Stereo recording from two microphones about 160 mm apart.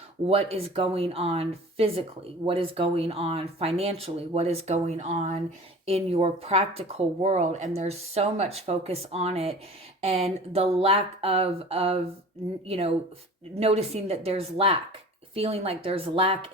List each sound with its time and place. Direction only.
0.3 s speech: 40° right (ahead or behind)